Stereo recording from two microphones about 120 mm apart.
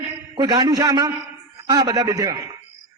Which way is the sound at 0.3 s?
35° right (ahead or behind).